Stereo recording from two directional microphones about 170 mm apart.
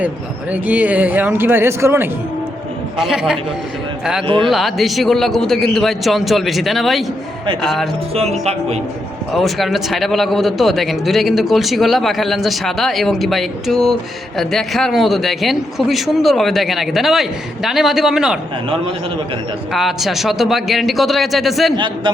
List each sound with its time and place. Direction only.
0.5 s speech: 10° right (ahead or behind)
3.0 s a man's voice: 5° right (ahead or behind)
4.4 s a man's voice: centre (ahead or behind)
8.1 s speech: 40° right (ahead or behind)
9.3 s a man's voice: centre (ahead or behind)
19.7 s a man's voice: centre (ahead or behind)
21.8 s a man's voice: 25° right (ahead or behind)